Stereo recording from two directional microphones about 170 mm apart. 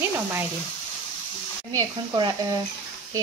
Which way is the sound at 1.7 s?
25° right (ahead or behind).